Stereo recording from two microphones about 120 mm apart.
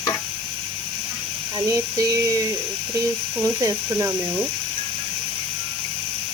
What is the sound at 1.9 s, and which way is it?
Speech, 30° right (ahead or behind).